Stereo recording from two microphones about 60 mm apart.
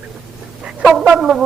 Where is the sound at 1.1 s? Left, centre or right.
Centre.